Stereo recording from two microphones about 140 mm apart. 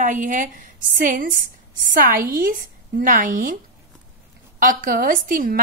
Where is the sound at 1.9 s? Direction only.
90° right.